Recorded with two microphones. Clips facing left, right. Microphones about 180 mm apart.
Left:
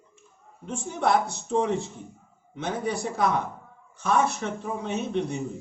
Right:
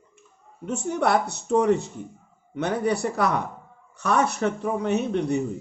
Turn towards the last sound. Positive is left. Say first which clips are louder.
# right 5 dB
turn(degrees=-65)  # may be behind; listen again after turning